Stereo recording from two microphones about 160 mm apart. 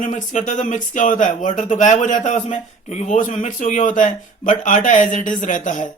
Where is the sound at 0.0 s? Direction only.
50° left (ahead or behind).